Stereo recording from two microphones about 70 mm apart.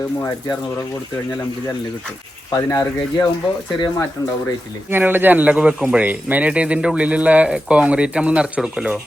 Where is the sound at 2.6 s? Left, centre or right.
Left.